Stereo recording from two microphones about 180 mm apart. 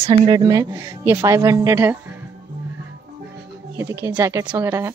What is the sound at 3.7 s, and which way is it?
Speech, 15° right (ahead or behind).